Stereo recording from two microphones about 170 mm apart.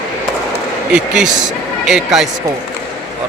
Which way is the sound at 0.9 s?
5° right (ahead or behind).